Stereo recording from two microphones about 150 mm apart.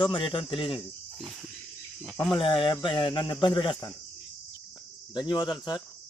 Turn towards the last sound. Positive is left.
turn(degrees=30)  # may be behind; listen again after turning